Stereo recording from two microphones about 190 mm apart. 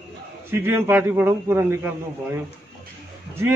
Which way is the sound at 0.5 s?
10° right (ahead or behind).